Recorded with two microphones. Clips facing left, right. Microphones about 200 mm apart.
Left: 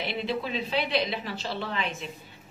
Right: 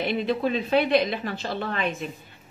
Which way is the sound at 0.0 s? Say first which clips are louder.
Right 6 dB; 50° right (ahead or behind).